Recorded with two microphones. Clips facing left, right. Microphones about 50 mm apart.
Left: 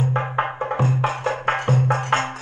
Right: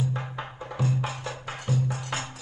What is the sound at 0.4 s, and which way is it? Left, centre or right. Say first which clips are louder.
Music: left 12 dB; left.